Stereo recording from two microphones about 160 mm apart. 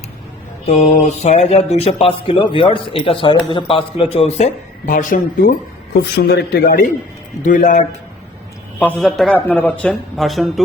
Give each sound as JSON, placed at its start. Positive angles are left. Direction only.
{"t": 0.6, "sound": "speech", "side_deg": 45}
{"t": 4.9, "sound": "speech", "side_deg": 60}
{"t": 6.0, "sound": "a man's voice", "side_deg": 85}
{"t": 7.4, "sound": "a man's voice", "side_deg": 55}
{"t": 8.8, "sound": "speech", "side_deg": 5}